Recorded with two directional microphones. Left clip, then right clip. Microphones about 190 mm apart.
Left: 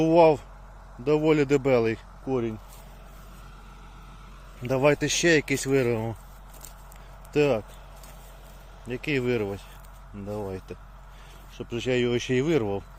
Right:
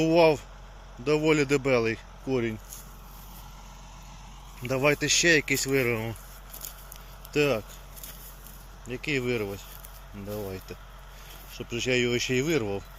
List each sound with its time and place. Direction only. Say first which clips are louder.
0.0 s speech: left 2 dB; 10° left (ahead or behind)
2.2 s speech: even; 5° right (ahead or behind)
4.6 s speech: left 2 dB; 15° left (ahead or behind)
7.3 s speech: left 2 dB; 10° left (ahead or behind)
8.9 s speech: left 2 dB; 20° left (ahead or behind)